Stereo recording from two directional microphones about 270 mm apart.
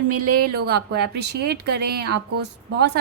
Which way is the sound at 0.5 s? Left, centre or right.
Right.